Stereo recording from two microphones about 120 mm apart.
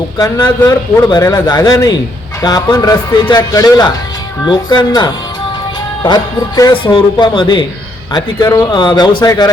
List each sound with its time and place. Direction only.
0.2 s speech: 35° left (ahead or behind)